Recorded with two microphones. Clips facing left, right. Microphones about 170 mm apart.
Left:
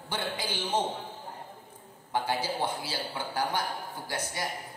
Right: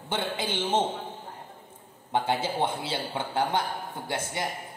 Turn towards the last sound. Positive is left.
turn(degrees=-25)  # may be behind; listen again after turning